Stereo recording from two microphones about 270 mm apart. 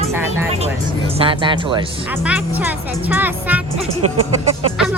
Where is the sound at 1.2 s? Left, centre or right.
Centre.